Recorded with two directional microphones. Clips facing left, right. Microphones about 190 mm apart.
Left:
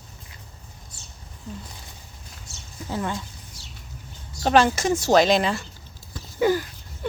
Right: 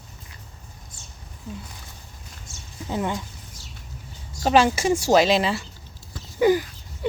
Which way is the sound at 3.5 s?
50° right (ahead or behind).